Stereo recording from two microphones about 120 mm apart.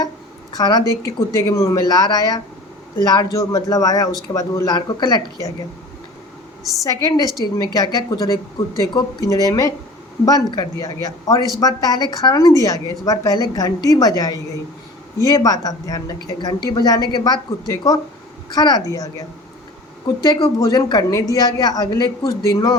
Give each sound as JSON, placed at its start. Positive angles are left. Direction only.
{"t": 0.5, "sound": "speech", "side_deg": 35}
{"t": 6.8, "sound": "a woman's voice", "side_deg": 30}
{"t": 20.6, "sound": "speech", "side_deg": 35}